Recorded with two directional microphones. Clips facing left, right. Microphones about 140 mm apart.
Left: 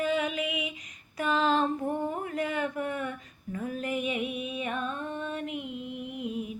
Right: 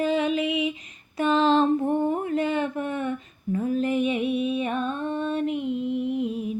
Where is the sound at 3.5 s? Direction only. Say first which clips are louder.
Right 8 dB; 30° right (ahead or behind).